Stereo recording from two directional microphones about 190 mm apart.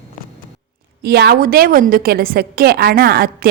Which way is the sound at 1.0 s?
60° right (ahead or behind).